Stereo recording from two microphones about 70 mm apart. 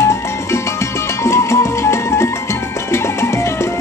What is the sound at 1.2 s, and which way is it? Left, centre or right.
Music, left.